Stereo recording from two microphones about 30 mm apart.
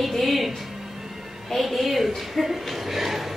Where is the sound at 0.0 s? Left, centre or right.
Centre.